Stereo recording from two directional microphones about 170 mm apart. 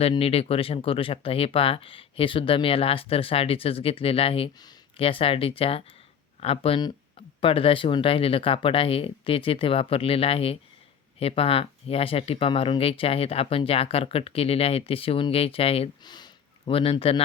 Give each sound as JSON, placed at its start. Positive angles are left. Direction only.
{"t": 0.0, "sound": "speech", "side_deg": 35}